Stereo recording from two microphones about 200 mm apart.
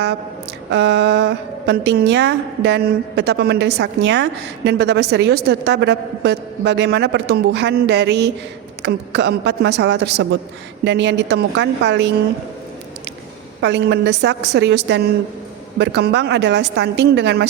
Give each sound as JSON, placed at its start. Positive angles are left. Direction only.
{"t": 0.7, "sound": "a woman's voice", "side_deg": -60}
{"t": 13.6, "sound": "a woman's voice", "side_deg": -60}